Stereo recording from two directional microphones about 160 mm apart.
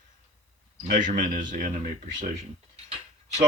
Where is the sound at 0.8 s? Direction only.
55° right (ahead or behind).